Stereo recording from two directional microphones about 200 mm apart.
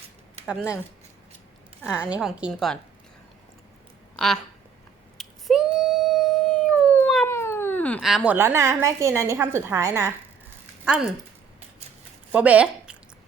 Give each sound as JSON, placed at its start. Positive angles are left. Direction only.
{"t": 0.4, "sound": "a woman's voice", "side_deg": -5}
{"t": 1.8, "sound": "a woman's voice", "side_deg": -5}
{"t": 5.1, "sound": "dog", "side_deg": 0}
{"t": 7.3, "sound": "speech", "side_deg": 10}
{"t": 12.3, "sound": "speech", "side_deg": -5}